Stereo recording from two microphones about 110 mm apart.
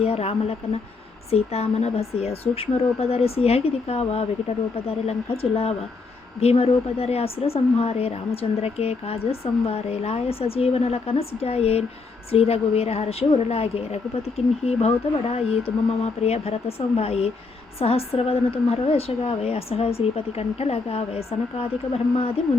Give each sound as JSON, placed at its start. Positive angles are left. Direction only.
{"t": 0.0, "sound": "a woman's voice", "side_deg": 65}